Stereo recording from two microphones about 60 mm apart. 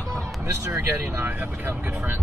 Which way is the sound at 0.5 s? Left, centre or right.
Right.